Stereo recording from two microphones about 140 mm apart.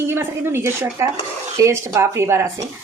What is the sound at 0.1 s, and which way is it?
Speech, 15° right (ahead or behind).